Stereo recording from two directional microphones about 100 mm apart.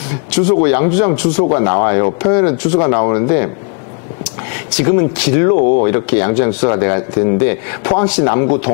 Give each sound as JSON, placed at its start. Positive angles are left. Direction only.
{"t": 0.5, "sound": "speech", "side_deg": 20}
{"t": 4.7, "sound": "speech", "side_deg": 20}